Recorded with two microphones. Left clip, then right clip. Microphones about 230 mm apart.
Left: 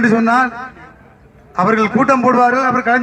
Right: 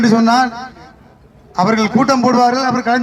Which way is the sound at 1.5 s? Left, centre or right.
Right.